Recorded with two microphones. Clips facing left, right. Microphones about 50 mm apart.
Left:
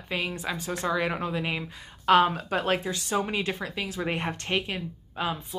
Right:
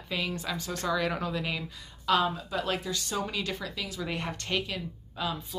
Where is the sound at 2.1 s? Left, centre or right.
Left.